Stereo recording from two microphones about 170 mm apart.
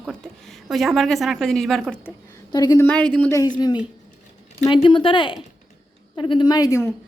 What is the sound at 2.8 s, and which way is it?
A woman's voice, 5° left (ahead or behind).